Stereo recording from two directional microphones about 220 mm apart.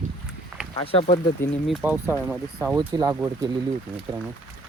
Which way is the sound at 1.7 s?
5° right (ahead or behind).